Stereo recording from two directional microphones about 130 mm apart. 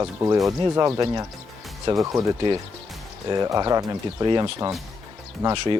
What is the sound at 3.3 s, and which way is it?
Speech, 30° right (ahead or behind).